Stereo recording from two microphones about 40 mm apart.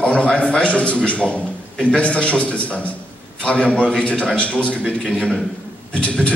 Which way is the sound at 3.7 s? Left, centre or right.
Left.